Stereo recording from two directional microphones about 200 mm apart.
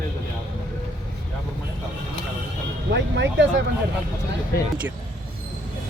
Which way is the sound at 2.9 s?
60° right (ahead or behind).